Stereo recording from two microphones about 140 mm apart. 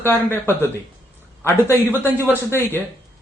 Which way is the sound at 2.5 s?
15° left (ahead or behind).